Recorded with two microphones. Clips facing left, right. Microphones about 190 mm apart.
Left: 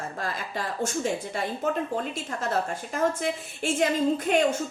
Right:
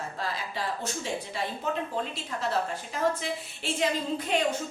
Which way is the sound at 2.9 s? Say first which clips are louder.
Left 3 dB; 50° left (ahead or behind).